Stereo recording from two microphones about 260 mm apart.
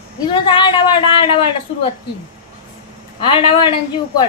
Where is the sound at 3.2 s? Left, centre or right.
Centre.